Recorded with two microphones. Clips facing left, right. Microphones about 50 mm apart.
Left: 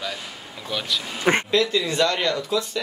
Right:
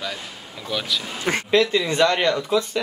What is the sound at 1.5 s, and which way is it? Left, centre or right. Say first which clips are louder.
Speech: right 2 dB; right.